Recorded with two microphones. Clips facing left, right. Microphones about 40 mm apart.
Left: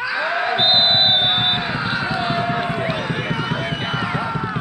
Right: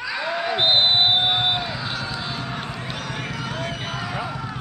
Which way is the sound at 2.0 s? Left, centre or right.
Left.